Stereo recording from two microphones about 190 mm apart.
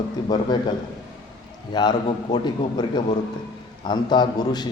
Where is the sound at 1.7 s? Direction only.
20° left (ahead or behind).